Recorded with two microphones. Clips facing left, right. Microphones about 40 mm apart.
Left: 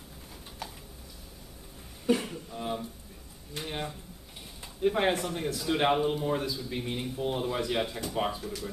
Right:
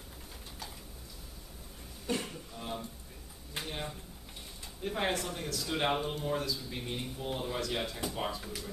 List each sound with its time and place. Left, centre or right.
2.0 s cough: centre
2.5 s a sound: centre
3.6 s a man's voice: centre